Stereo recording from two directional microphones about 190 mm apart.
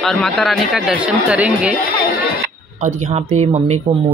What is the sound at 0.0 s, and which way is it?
Speech, centre (ahead or behind).